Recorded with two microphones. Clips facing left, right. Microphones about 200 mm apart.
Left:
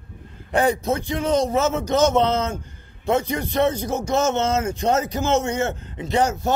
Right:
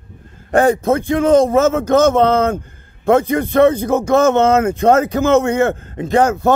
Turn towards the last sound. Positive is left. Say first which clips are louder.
# right 7 dB
turn(degrees=-55)  # may be behind; listen again after turning